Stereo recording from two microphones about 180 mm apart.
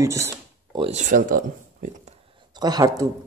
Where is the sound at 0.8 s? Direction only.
40° right (ahead or behind).